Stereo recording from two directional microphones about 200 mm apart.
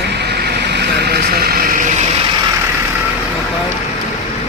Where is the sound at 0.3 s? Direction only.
55° right (ahead or behind).